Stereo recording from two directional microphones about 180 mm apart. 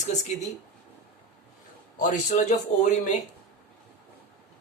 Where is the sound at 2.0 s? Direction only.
45° left (ahead or behind).